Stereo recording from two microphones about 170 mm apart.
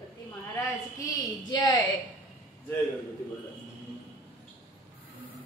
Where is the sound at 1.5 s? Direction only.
25° left (ahead or behind).